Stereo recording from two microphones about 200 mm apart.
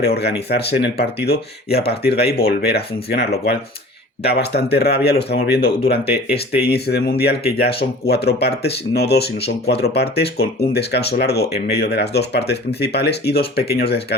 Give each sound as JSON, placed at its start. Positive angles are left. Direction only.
{"t": 0.0, "sound": "speech", "side_deg": 50}